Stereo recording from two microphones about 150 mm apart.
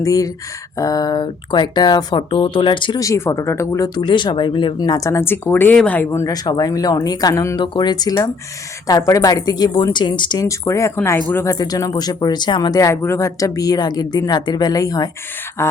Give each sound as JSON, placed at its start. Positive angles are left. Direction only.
{"t": 0.0, "sound": "speech", "side_deg": 25}
{"t": 3.0, "sound": "speech", "side_deg": 20}
{"t": 10.4, "sound": "speech", "side_deg": 20}
{"t": 11.5, "sound": "speech", "side_deg": 25}